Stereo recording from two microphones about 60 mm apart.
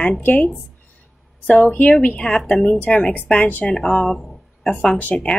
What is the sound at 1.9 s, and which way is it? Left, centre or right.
Speech, left.